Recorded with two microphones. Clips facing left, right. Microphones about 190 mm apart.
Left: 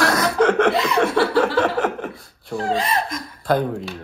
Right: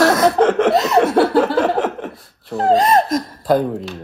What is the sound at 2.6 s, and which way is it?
Speech, 40° right (ahead or behind).